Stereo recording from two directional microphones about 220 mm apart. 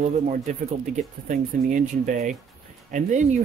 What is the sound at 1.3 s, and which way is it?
Speech, 35° right (ahead or behind).